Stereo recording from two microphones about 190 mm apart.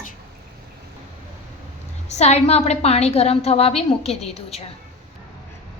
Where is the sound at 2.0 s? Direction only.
35° left (ahead or behind).